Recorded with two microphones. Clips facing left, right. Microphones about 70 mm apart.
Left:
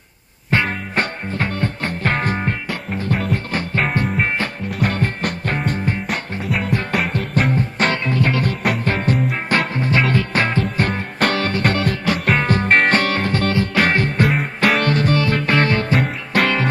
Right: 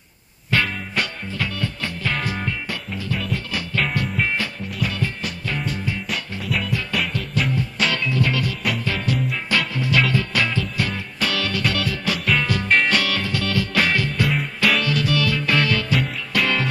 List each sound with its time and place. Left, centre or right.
0.7 s music: left
3.5 s music: left
16.0 s music: left